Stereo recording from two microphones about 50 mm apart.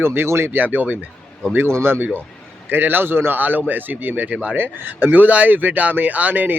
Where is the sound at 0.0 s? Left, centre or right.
Right.